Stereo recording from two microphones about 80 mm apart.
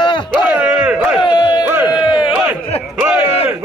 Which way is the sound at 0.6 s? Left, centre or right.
Centre.